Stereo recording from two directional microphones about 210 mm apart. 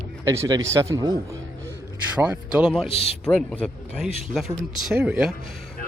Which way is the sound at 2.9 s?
30° left (ahead or behind).